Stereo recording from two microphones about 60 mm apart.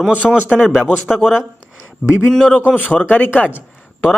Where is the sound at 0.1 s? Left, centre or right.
Right.